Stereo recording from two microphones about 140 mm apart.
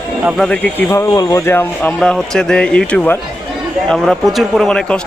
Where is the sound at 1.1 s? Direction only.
25° left (ahead or behind).